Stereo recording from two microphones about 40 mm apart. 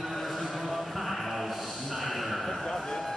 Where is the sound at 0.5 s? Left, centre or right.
Centre.